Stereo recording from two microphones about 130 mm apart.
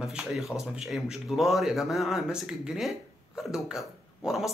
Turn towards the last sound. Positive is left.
turn(degrees=-5)  # may be behind; listen again after turning